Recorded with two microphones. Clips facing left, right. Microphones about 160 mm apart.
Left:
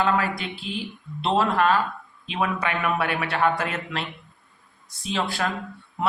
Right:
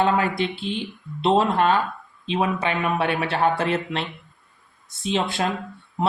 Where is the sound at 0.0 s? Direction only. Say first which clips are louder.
Right 3 dB; 25° right (ahead or behind).